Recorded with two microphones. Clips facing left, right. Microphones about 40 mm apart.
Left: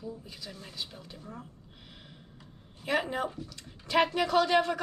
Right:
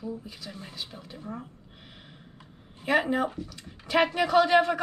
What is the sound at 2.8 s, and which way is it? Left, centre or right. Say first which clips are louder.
Speech: right 5 dB; centre.